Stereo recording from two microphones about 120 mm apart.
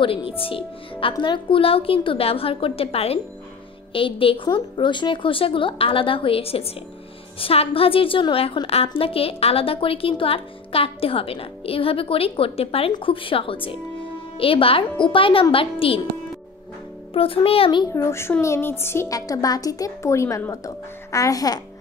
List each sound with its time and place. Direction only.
0.0 s a woman's voice: 50° left (ahead or behind)
17.1 s a woman's voice: 50° left (ahead or behind)
17.9 s a woman's voice: 25° left (ahead or behind)